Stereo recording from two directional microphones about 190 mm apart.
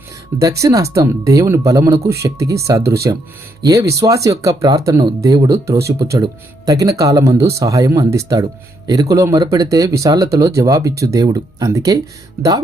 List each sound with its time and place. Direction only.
0.3 s speech: 15° right (ahead or behind)